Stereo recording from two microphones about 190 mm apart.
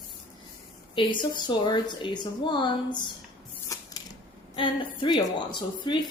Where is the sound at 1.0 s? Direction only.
25° left (ahead or behind).